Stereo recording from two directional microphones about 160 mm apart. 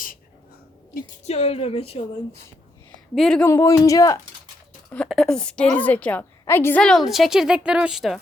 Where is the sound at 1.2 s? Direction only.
40° left (ahead or behind).